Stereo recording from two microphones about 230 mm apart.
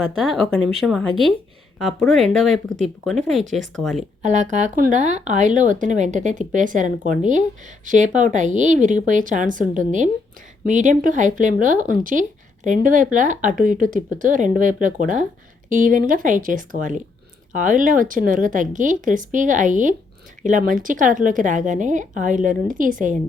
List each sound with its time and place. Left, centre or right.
0.0 s speech: centre
4.2 s speech: right